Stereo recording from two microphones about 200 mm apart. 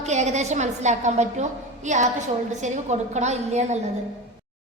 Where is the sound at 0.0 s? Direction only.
35° right (ahead or behind).